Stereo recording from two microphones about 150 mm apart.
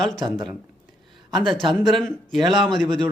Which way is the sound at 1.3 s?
Centre (ahead or behind).